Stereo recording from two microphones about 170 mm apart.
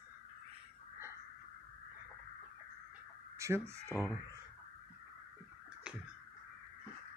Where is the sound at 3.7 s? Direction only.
15° right (ahead or behind).